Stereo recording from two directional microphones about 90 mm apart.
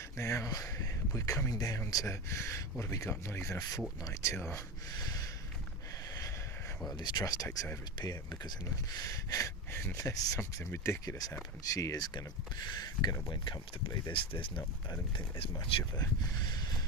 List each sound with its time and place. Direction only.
0.2 s speech: 35° left (ahead or behind)
4.9 s a sound: 45° left (ahead or behind)
7.0 s speech: 45° left (ahead or behind)
14.1 s speech: 70° left (ahead or behind)
16.0 s speech: 45° left (ahead or behind)